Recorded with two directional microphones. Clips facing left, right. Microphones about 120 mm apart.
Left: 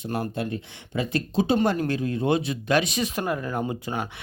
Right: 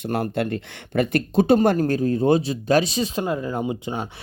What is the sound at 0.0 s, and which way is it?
Speech, 65° right (ahead or behind).